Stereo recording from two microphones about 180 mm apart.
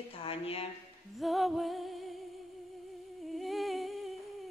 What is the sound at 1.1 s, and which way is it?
Music, centre (ahead or behind).